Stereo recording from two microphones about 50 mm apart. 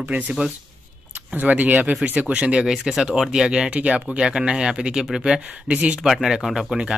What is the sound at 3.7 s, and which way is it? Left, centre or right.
Speech, right.